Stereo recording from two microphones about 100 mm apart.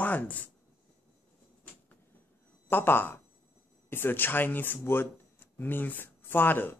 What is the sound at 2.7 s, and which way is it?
Speech, 20° left (ahead or behind).